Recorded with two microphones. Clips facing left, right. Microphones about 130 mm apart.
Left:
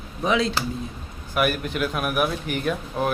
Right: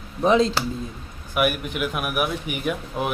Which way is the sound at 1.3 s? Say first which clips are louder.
Even; 10° right (ahead or behind).